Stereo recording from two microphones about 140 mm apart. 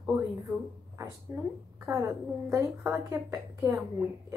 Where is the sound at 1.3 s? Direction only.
25° right (ahead or behind).